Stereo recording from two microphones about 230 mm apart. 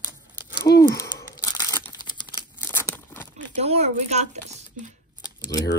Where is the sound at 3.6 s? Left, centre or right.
Right.